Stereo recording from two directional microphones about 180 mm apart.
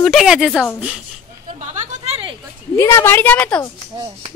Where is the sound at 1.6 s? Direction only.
40° right (ahead or behind).